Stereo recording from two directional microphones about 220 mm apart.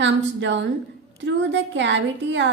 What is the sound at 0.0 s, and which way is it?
A woman's voice, 55° right (ahead or behind).